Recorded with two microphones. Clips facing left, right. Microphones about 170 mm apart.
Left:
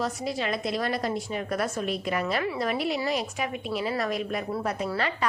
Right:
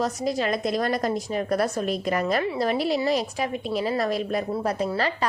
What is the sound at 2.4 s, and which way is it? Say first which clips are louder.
A woman's voice: right 3 dB; 30° right (ahead or behind).